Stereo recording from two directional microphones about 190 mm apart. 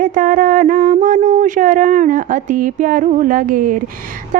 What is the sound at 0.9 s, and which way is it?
Speech, 40° right (ahead or behind).